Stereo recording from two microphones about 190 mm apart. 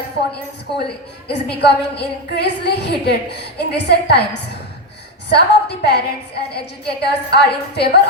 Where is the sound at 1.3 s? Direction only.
60° left (ahead or behind).